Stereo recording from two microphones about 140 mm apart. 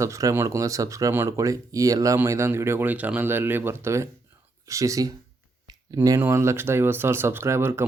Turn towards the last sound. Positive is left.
turn(degrees=-15)  # may be behind; listen again after turning